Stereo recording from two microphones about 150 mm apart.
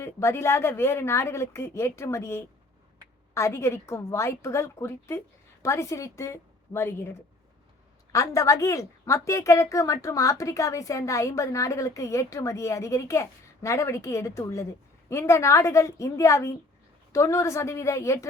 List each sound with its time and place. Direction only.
0.0 s a woman's voice: 15° left (ahead or behind)
8.1 s a woman's voice: 20° left (ahead or behind)